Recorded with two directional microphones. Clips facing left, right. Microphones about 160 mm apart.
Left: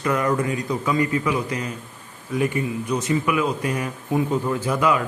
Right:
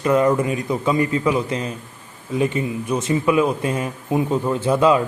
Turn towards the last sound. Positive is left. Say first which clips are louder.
# right 5 dB
turn(degrees=-30)  # may be behind; listen again after turning